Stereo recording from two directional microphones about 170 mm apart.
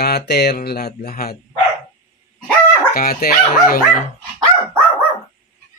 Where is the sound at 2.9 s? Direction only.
55° left (ahead or behind).